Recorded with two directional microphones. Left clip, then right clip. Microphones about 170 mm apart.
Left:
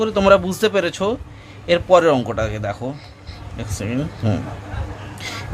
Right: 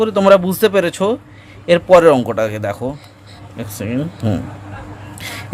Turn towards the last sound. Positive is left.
turn(degrees=-35)  # may be behind; listen again after turning